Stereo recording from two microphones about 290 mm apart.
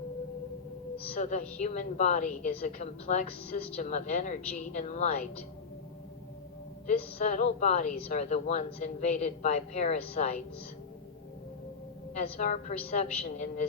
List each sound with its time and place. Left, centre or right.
0.9 s music: left
1.6 s a man's voice: left
6.8 s a man's voice: left
12.4 s a man's voice: left